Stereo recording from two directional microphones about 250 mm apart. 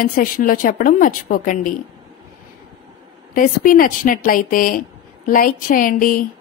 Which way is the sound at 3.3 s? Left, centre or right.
Left.